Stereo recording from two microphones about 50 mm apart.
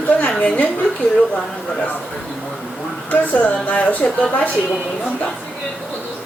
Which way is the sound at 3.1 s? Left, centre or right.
Left.